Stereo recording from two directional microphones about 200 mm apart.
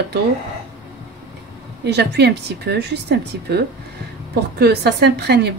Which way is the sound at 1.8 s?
55° right (ahead or behind).